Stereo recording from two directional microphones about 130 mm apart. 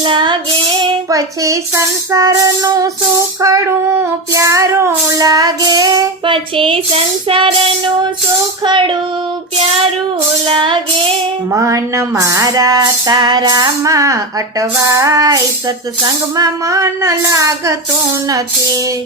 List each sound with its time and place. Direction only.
0.0 s music: 40° right (ahead or behind)
1.1 s child singing: 25° right (ahead or behind); by 7.5 s 40° right (ahead or behind)
8.6 s music: 40° right (ahead or behind)
10.5 s music: 40° right (ahead or behind)
11.5 s child singing: 25° right (ahead or behind)
16.4 s child singing: 25° right (ahead or behind)